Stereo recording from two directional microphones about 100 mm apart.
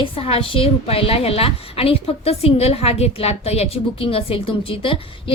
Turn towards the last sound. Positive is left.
turn(degrees=60)  # may be behind; listen again after turning